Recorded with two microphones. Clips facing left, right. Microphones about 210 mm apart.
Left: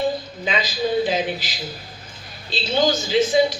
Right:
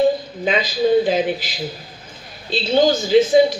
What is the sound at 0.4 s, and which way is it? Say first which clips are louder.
A woman's voice: right 6 dB; 55° right (ahead or behind).